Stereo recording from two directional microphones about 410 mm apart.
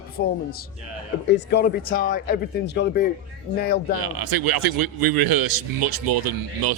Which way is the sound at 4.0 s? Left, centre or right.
Right.